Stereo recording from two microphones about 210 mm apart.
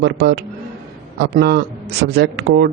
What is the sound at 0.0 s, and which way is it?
Speech, 50° right (ahead or behind).